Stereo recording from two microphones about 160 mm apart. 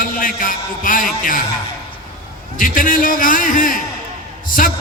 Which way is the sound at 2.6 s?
55° left (ahead or behind).